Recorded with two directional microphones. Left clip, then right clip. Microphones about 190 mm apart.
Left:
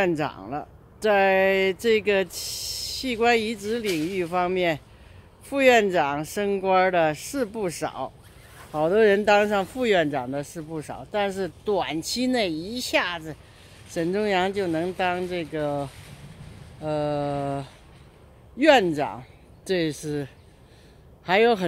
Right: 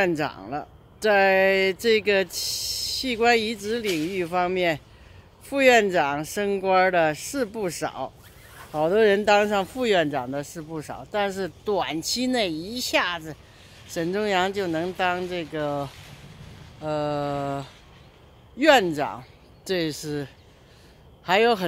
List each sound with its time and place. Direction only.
0.0 s speech: 10° left (ahead or behind)
3.8 s speech: 60° left (ahead or behind)
4.1 s speech: 10° left (ahead or behind)
21.3 s speech: 5° left (ahead or behind)